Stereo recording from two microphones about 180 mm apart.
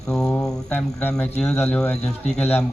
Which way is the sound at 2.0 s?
35° left (ahead or behind).